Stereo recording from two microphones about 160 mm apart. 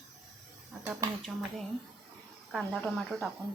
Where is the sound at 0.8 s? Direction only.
15° right (ahead or behind).